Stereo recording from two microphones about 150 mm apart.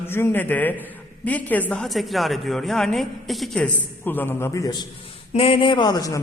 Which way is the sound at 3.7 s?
15° left (ahead or behind).